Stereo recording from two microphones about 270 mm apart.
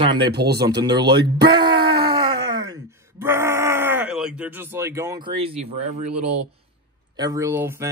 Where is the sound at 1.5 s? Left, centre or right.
Centre.